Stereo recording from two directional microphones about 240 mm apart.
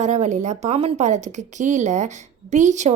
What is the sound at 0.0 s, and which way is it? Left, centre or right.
A woman's voice, right.